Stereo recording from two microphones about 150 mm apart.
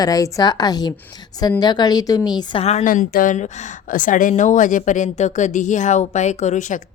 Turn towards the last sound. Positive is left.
turn(degrees=55)  # may be behind; listen again after turning